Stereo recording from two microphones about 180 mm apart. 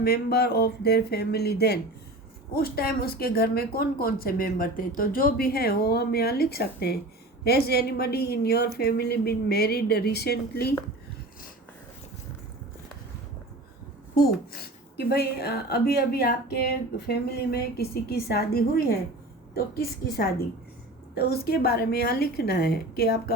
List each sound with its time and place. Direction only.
0.0 s a woman's voice: 60° left (ahead or behind)
14.5 s a woman's voice: 60° left (ahead or behind)